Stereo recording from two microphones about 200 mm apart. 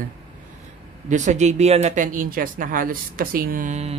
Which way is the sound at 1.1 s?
35° right (ahead or behind).